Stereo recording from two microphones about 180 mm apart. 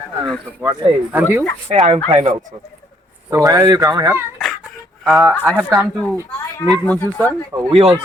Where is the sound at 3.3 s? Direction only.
20° right (ahead or behind).